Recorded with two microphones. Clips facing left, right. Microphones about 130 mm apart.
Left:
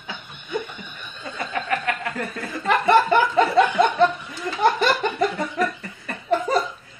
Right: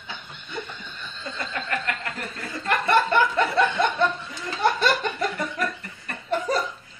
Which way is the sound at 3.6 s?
15° left (ahead or behind).